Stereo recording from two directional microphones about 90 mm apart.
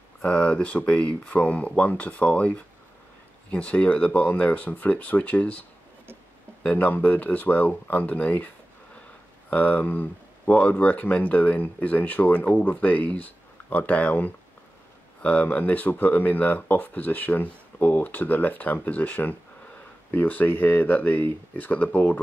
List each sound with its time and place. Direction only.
0.2 s speech: 15° left (ahead or behind)
9.5 s speech: 15° left (ahead or behind)